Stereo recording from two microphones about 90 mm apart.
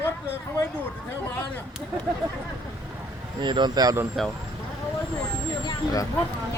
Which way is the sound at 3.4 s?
60° right (ahead or behind).